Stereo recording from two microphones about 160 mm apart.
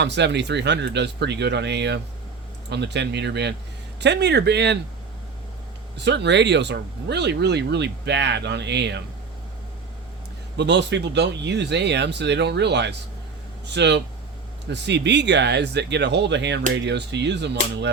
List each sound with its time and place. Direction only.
0.0 s speech: 90° right
6.0 s speech: 90° right
10.6 s speech: 90° right